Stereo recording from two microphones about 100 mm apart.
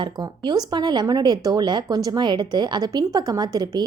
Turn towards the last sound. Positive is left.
turn(degrees=-45)  # may be behind; listen again after turning